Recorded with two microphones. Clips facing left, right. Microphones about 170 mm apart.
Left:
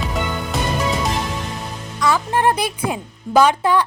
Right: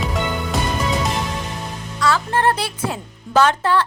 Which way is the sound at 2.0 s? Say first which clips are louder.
Left 1 dB; 15° left (ahead or behind).